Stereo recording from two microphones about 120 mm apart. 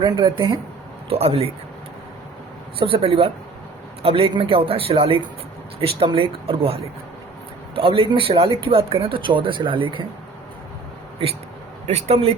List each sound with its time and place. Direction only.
0.0 s speech: 45° right (ahead or behind)
1.1 s speech: 55° right (ahead or behind)
2.7 s speech: 50° right (ahead or behind)
7.8 s speech: 50° right (ahead or behind)
11.9 s speech: 60° right (ahead or behind)